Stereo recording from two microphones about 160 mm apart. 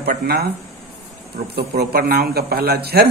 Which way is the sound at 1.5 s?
80° right.